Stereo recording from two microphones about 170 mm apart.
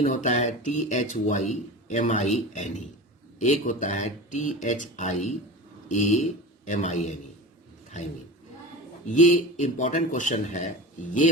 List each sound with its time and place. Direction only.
0.0 s speech: 45° left (ahead or behind)
9.1 s speech: 45° left (ahead or behind)